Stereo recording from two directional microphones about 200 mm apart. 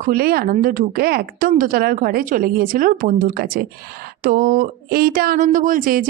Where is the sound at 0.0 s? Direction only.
50° right (ahead or behind).